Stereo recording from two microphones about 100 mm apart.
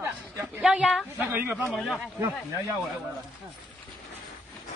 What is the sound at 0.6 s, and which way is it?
Speech, 5° right (ahead or behind).